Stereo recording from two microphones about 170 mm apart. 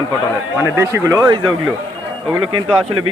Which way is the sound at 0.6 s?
15° right (ahead or behind).